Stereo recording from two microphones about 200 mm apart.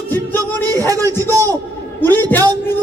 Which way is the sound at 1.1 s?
10° left (ahead or behind).